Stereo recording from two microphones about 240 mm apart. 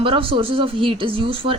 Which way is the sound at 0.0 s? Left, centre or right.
Right.